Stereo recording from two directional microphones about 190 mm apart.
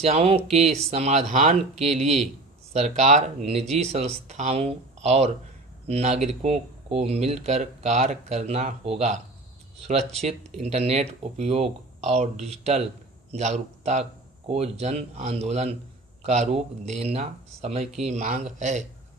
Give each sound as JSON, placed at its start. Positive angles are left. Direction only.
{"t": 0.0, "sound": "speech", "side_deg": -35}